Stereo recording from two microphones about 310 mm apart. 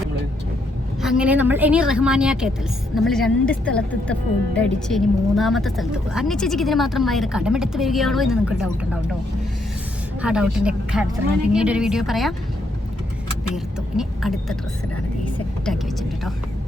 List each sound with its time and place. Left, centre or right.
1.0 s a woman's voice: centre
10.2 s a woman's voice: centre
13.9 s speech: centre